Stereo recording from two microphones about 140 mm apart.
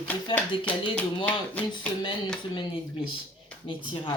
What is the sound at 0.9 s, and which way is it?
Speech, 10° left (ahead or behind).